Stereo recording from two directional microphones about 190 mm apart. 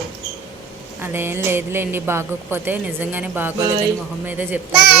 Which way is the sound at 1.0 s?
10° right (ahead or behind).